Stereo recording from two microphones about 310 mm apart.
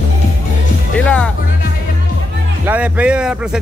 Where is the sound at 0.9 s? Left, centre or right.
Centre.